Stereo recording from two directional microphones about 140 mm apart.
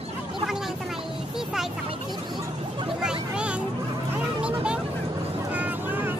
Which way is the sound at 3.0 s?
5° right (ahead or behind).